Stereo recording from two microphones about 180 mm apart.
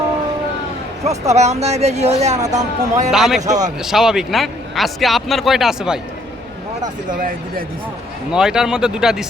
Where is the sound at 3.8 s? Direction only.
5° right (ahead or behind).